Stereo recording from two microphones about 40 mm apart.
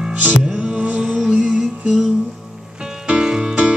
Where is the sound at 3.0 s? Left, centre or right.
Right.